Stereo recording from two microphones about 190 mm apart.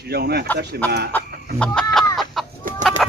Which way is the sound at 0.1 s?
55° right (ahead or behind).